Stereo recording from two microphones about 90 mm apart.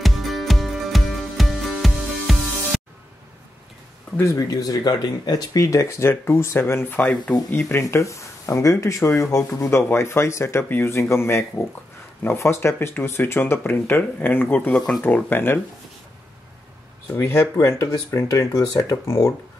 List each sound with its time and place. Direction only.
0.0 s music: centre (ahead or behind)
4.4 s speech: 45° left (ahead or behind); by 7.3 s 15° left (ahead or behind)
7.5 s speech: 30° left (ahead or behind)
17.1 s speech: 30° left (ahead or behind)